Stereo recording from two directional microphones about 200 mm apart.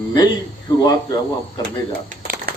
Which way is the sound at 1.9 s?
50° right (ahead or behind).